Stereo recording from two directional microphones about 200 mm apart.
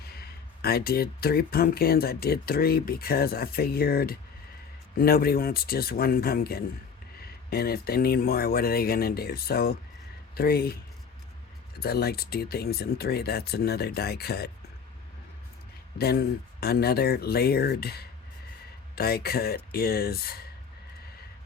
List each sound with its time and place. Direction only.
0.0 s speech: 50° left (ahead or behind)
11.8 s speech: 50° left (ahead or behind)
16.0 s speech: 50° left (ahead or behind)